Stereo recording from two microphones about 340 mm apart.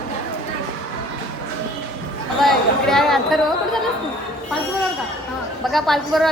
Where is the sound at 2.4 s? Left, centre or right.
Centre.